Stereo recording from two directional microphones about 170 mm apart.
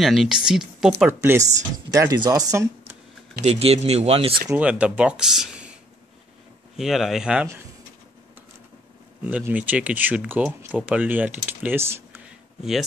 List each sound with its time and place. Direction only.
0.0 s speech: centre (ahead or behind); by 3.0 s 15° right (ahead or behind)
3.4 s speech: 35° right (ahead or behind)
4.6 s speech: 5° right (ahead or behind)
6.8 s speech: centre (ahead or behind)
9.2 s speech: 10° right (ahead or behind)